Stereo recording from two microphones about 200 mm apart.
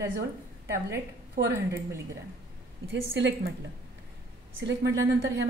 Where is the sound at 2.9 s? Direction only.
60° right (ahead or behind).